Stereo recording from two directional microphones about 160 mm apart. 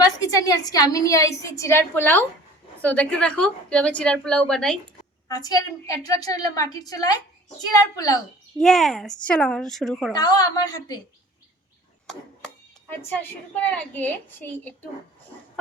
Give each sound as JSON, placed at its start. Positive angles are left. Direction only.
{"t": 0.0, "sound": "a woman's voice", "side_deg": 20}
{"t": 5.3, "sound": "a woman's voice", "side_deg": 25}
{"t": 8.5, "sound": "a woman's voice", "side_deg": 0}
{"t": 10.1, "sound": "a woman's voice", "side_deg": 25}
{"t": 13.0, "sound": "a woman's voice", "side_deg": 10}